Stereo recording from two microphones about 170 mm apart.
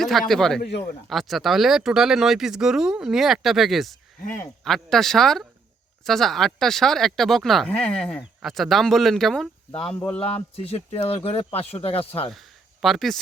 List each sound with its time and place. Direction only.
0.0 s speech: centre (ahead or behind)
0.6 s speech: 70° left (ahead or behind)
1.1 s speech: centre (ahead or behind)
10.5 s speech: 35° left (ahead or behind)
12.3 s a sound: centre (ahead or behind)